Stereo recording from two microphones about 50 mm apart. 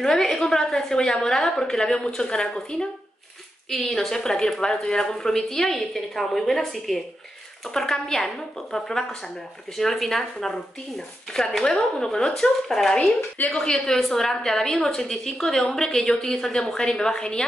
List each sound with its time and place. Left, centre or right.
0.0 s a woman's voice: centre
3.7 s a woman's voice: centre
12.9 s speech: left
13.5 s a woman's voice: centre